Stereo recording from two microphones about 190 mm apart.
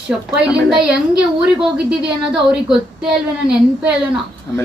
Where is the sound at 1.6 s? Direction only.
5° right (ahead or behind).